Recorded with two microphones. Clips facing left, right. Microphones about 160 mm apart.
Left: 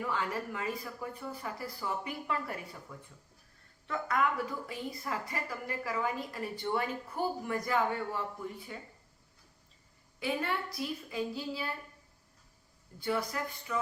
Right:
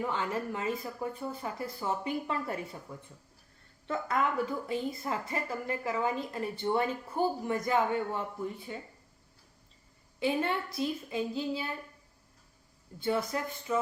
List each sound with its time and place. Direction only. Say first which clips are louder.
0.0 s a woman's voice: right 2 dB; 25° right (ahead or behind)
10.2 s a woman's voice: right 4 dB; 25° right (ahead or behind)
13.0 s a woman's voice: right 3 dB; 25° right (ahead or behind)